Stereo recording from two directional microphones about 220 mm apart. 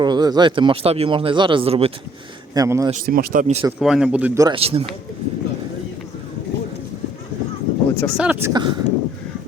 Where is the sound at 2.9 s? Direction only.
40° right (ahead or behind).